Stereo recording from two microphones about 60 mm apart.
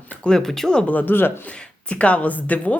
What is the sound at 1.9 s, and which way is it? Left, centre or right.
Speech, left.